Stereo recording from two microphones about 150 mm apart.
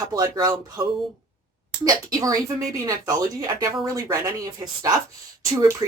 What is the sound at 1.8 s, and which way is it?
Speech, 25° right (ahead or behind).